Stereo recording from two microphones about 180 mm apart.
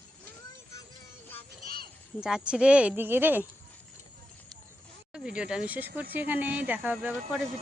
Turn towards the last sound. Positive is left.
turn(degrees=-10)  # may be behind; listen again after turning